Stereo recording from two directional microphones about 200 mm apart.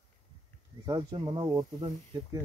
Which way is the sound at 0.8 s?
20° right (ahead or behind).